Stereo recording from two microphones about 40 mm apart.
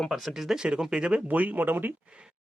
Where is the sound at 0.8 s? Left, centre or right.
Right.